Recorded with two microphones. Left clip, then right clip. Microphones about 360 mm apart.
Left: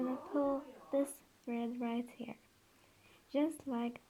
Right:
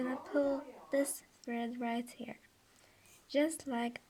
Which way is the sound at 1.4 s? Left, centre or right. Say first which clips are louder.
Right 2 dB; centre.